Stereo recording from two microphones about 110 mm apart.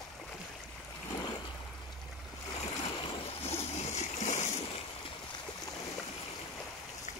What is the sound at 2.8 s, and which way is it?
Boat, 55° left (ahead or behind).